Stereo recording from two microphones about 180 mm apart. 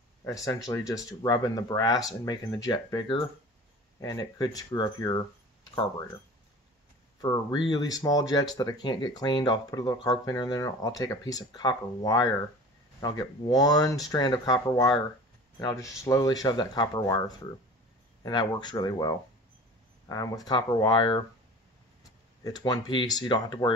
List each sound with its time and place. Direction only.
0.2 s speech: 15° left (ahead or behind)
7.2 s speech: 20° left (ahead or behind)
18.2 s speech: 25° left (ahead or behind)
22.4 s speech: 20° left (ahead or behind)